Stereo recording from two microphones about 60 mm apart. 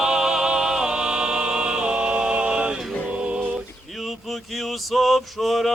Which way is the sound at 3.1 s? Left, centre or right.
Centre.